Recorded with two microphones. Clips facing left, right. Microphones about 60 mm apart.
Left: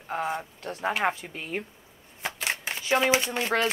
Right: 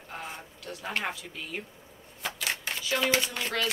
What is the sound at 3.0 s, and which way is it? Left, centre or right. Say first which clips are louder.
Speech: left 4 dB; left.